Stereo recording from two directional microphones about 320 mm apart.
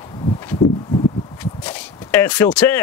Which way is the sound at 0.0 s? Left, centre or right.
Centre.